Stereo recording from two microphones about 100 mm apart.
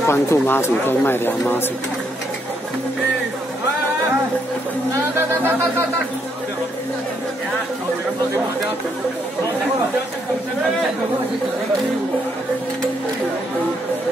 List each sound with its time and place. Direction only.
0.0 s speech: 25° left (ahead or behind)